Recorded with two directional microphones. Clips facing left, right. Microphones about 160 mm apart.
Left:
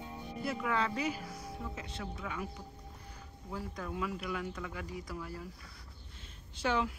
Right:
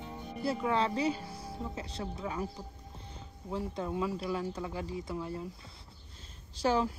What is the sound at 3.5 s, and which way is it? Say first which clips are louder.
Speech: right 5 dB; 25° right (ahead or behind).